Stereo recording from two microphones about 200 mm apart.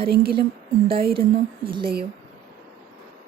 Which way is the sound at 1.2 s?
25° right (ahead or behind).